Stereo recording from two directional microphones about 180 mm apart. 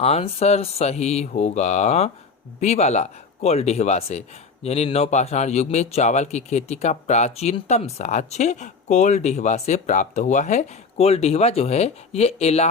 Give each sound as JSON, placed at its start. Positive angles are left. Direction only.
{"t": 0.0, "sound": "speech", "side_deg": 35}